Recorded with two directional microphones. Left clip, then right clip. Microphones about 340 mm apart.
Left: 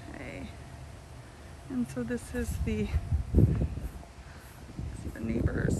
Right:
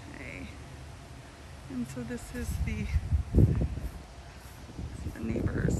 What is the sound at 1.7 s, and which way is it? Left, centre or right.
Speech, centre.